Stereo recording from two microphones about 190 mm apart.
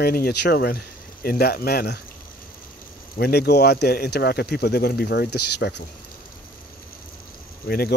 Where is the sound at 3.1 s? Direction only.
55° left (ahead or behind).